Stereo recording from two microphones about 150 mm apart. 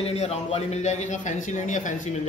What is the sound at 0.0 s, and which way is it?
A man's voice, 45° left (ahead or behind).